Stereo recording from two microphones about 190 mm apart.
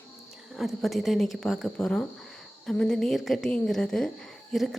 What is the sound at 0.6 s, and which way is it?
A woman's voice, centre (ahead or behind).